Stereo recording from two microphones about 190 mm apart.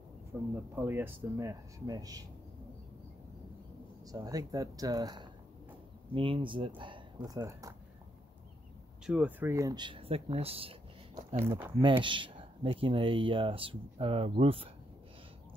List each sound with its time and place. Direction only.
0.3 s speech: 10° right (ahead or behind)
4.1 s speech: 20° right (ahead or behind)
9.0 s speech: 5° right (ahead or behind); by 10.8 s 30° right (ahead or behind)
11.3 s speech: 10° right (ahead or behind)
11.8 s speech: 25° right (ahead or behind)